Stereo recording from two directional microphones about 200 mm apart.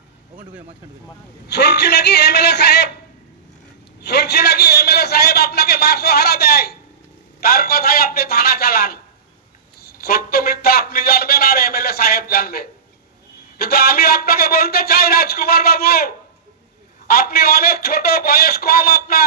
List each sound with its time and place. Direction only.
1.5 s a man's voice: 55° left (ahead or behind)
4.0 s a sound: 55° left (ahead or behind)
13.6 s a man's voice: 50° left (ahead or behind)
17.1 s a man's voice: 50° left (ahead or behind)